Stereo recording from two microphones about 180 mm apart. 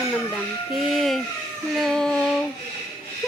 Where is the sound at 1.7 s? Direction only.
Centre (ahead or behind).